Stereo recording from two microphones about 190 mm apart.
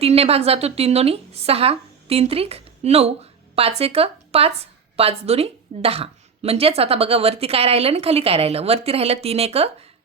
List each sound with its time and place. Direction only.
0.0 s a woman's voice: 30° right (ahead or behind)